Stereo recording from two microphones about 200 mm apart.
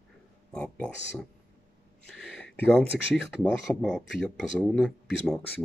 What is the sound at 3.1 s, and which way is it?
Speech, centre (ahead or behind).